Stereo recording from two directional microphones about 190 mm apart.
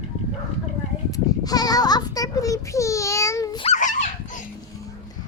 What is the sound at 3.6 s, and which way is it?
Dog, 40° left (ahead or behind).